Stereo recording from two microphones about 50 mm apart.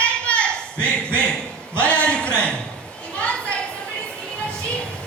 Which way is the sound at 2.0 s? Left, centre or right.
Left.